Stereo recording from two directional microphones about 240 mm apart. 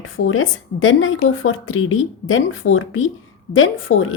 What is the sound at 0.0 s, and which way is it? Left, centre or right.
A woman's voice, left.